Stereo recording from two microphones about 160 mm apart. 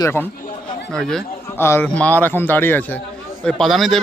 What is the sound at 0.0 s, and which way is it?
Speech, 15° left (ahead or behind).